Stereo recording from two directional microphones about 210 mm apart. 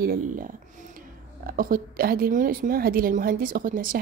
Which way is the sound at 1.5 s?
40° right (ahead or behind).